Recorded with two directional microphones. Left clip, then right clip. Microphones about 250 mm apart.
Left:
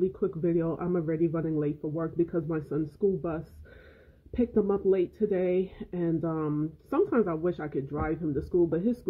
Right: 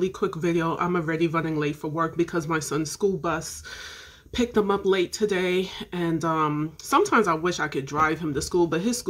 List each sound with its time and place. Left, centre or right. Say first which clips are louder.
0.0 s speech: right 3 dB; centre
4.6 s speech: right 3 dB; centre
4.9 s speech: right 3 dB; centre